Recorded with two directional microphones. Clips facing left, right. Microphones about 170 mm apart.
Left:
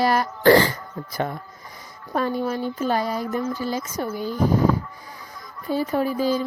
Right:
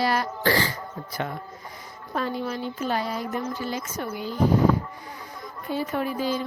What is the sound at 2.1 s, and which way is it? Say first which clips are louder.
A woman's voice: left 5 dB; 45° left (ahead or behind).